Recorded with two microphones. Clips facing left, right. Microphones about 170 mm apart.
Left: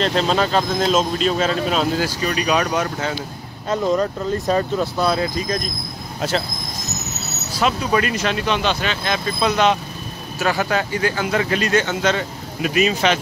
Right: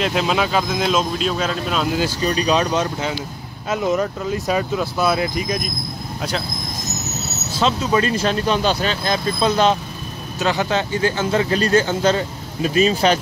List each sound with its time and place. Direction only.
0.0 s speech: 5° right (ahead or behind)
1.9 s speech: 20° right (ahead or behind)
3.6 s speech: 10° right (ahead or behind)
7.9 s speech: 30° right (ahead or behind)
10.4 s speech: 20° right (ahead or behind)